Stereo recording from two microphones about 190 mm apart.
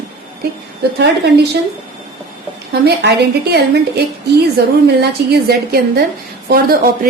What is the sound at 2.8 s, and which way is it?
A woman's voice, 60° right (ahead or behind).